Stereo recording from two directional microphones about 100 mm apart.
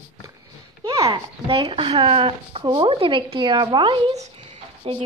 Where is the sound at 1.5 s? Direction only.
60° right (ahead or behind).